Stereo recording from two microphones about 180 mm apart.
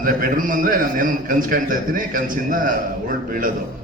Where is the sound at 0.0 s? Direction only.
50° right (ahead or behind).